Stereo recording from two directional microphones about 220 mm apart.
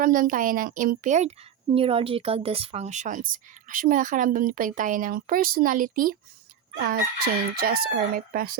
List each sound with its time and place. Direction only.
0.0 s speech: 40° right (ahead or behind)
6.7 s crowing: 45° right (ahead or behind)